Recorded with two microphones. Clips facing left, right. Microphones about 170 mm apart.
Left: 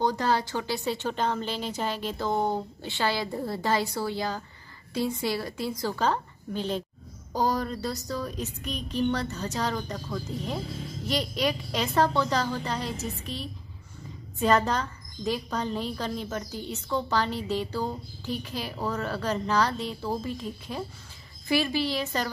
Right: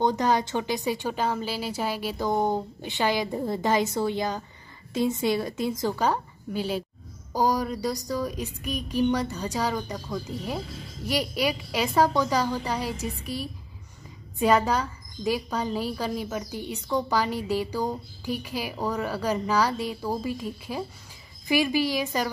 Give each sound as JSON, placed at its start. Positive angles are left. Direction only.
{"t": 0.0, "sound": "a woman's voice", "side_deg": -20}